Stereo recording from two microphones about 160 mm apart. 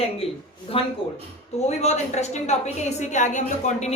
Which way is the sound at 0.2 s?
35° left (ahead or behind).